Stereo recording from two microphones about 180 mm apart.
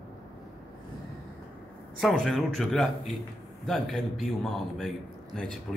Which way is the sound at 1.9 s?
Centre (ahead or behind).